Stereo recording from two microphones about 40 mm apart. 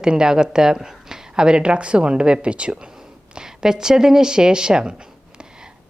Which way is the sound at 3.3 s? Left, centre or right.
Centre.